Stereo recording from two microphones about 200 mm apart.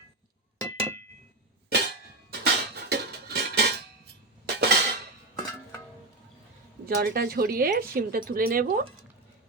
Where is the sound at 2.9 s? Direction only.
50° right (ahead or behind).